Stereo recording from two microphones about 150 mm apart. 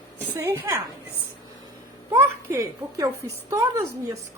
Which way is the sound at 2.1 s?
20° right (ahead or behind).